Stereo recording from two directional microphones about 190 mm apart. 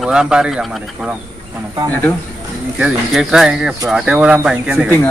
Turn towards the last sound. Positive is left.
turn(degrees=-5)  # may be behind; listen again after turning